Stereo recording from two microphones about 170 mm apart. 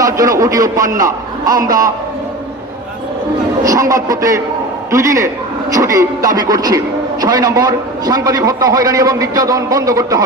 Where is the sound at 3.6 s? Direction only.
20° right (ahead or behind).